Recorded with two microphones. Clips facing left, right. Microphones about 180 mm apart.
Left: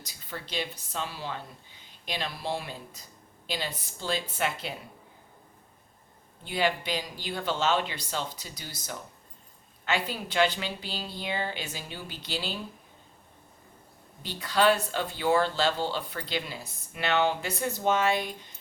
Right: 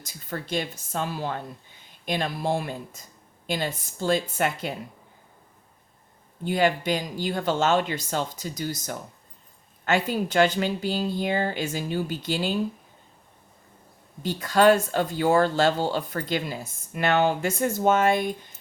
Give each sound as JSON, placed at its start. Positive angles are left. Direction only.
{"t": 0.0, "sound": "speech", "side_deg": -50}
{"t": 6.4, "sound": "speech", "side_deg": -45}
{"t": 14.2, "sound": "speech", "side_deg": -45}